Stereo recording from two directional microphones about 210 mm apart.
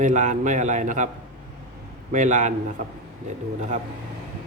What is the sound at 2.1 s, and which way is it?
Speech, 35° right (ahead or behind).